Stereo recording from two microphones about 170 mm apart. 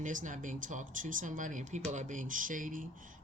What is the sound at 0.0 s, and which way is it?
Speech, 50° right (ahead or behind).